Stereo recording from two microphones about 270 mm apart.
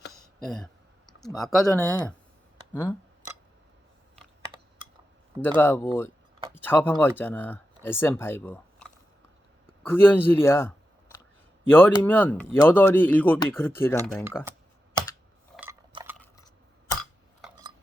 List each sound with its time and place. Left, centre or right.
0.0 s a sound: left
0.4 s speech: centre
5.4 s speech: centre
11.7 s speech: centre
15.9 s stir: centre
16.1 s a sound: centre